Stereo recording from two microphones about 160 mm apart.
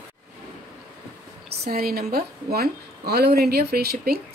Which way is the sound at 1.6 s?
75° right (ahead or behind).